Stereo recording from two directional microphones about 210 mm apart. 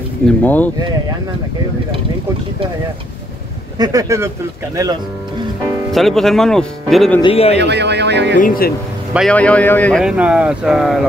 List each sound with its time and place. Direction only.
0.4 s speech: 10° left (ahead or behind)
3.7 s speech: 15° right (ahead or behind)
5.9 s speech: centre (ahead or behind)
7.2 s speech: 25° left (ahead or behind)
7.5 s speech: 55° right (ahead or behind)
8.4 s speech: 45° left (ahead or behind)
9.1 s speech: 5° left (ahead or behind)